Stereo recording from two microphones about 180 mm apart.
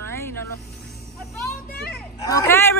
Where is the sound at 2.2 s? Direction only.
15° left (ahead or behind).